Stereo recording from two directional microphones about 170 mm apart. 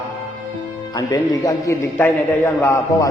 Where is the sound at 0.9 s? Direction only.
20° left (ahead or behind).